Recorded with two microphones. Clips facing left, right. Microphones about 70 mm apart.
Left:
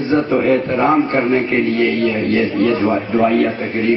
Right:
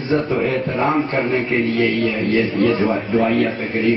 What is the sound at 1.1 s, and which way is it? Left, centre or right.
Speech, left.